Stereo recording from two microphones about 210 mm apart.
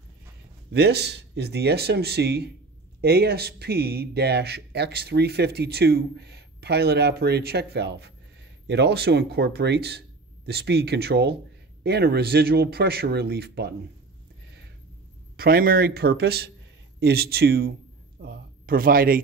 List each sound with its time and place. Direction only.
0.7 s speech: 50° right (ahead or behind)
15.3 s speech: 45° right (ahead or behind)